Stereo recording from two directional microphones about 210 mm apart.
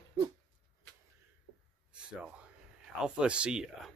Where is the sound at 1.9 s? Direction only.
5° right (ahead or behind).